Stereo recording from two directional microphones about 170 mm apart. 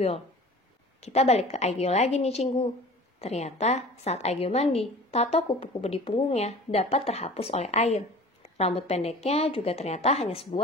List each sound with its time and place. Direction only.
1.0 s a woman's voice: 40° left (ahead or behind)